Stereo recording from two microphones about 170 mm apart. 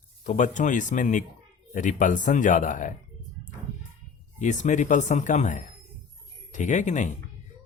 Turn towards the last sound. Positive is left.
turn(degrees=45)  # may be behind; listen again after turning